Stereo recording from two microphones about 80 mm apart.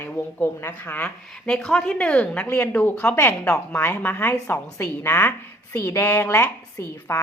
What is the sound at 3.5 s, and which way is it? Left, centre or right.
A woman's voice, centre.